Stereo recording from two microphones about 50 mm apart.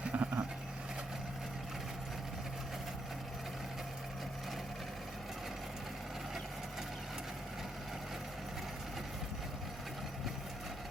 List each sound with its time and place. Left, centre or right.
0.0 s vehicle: right